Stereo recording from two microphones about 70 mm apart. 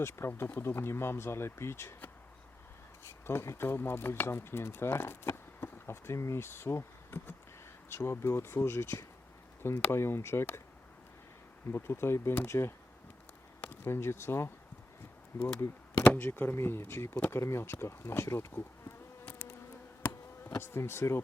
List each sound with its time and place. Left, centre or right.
0.0 s speech: left
3.2 s speech: left
11.7 s speech: left
13.8 s speech: left
20.0 s insect: left
20.5 s speech: left